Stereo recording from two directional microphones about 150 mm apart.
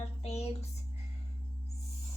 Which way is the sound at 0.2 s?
45° left (ahead or behind).